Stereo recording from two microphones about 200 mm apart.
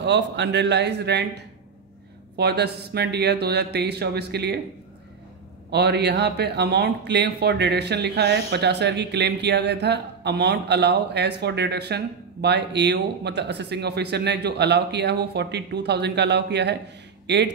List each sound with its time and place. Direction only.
0.0 s a man's voice: 60° right (ahead or behind)
5.7 s a man's voice: 55° right (ahead or behind)